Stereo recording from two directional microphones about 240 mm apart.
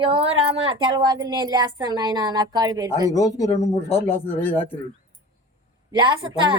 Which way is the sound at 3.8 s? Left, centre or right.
Left.